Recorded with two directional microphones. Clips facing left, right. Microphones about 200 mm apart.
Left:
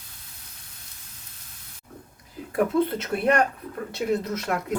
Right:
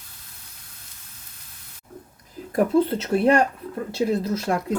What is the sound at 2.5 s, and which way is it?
Speech, 35° right (ahead or behind).